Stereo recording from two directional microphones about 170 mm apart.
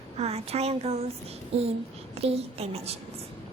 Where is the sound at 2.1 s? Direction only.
35° right (ahead or behind).